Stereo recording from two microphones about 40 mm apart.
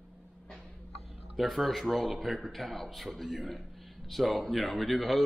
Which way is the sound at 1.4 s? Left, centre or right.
Centre.